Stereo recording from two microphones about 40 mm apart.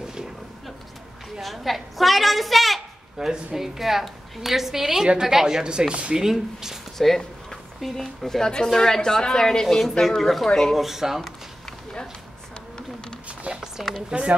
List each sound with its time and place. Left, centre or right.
1.4 s a woman's voice: centre
3.2 s a woman's voice: centre
7.0 s speech: centre
9.8 s a woman's voice: centre
10.8 s a woman's voice: centre
13.5 s a sound: centre
14.1 s speech: centre